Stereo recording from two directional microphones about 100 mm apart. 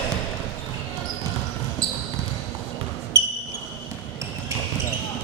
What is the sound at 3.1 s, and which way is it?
Basketball bounce, 25° right (ahead or behind).